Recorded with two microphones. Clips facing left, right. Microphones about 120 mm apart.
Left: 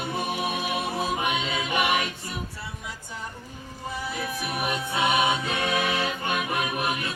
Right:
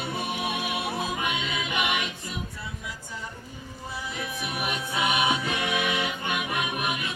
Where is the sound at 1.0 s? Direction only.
30° left (ahead or behind).